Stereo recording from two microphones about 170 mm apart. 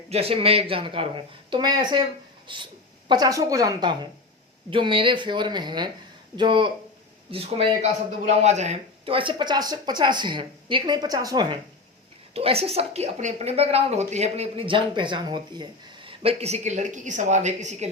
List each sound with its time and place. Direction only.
0.1 s a woman's voice: 35° right (ahead or behind)
12.3 s a woman's voice: 35° right (ahead or behind)